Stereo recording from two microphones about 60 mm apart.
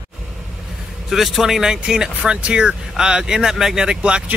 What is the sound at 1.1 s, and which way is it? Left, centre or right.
Speech, centre.